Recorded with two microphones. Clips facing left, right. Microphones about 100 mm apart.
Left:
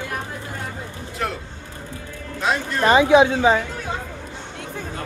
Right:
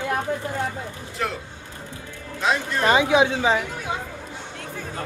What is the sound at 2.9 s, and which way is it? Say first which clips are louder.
Speech: left 5 dB; 35° left (ahead or behind).